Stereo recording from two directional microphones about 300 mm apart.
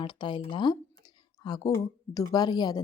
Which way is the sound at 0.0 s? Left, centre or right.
Centre.